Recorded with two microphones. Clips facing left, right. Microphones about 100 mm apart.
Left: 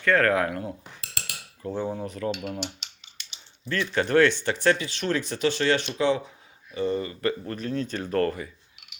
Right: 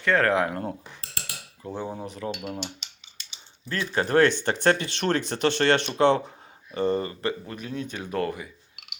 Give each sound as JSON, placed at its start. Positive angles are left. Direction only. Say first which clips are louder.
{"t": 0.0, "sound": "speech", "louder": "even", "side_deg": -20}
{"t": 1.6, "sound": "speech", "louder": "left 3 dB", "side_deg": -10}
{"t": 2.0, "sound": "speech", "louder": "left 3 dB", "side_deg": -20}
{"t": 3.7, "sound": "speech", "louder": "left 1 dB", "side_deg": -30}
{"t": 6.7, "sound": "speech", "louder": "right 2 dB", "side_deg": -45}
{"t": 7.2, "sound": "speech", "louder": "left 2 dB", "side_deg": -25}
{"t": 7.5, "sound": "speech", "louder": "left 4 dB", "side_deg": -10}